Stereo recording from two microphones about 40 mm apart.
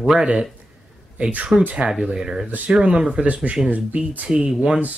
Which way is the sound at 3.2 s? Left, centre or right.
Right.